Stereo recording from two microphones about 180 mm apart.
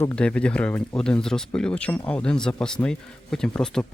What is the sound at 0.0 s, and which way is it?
Speech, 10° left (ahead or behind).